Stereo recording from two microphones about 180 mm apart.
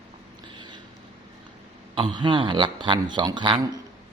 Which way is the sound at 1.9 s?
30° right (ahead or behind).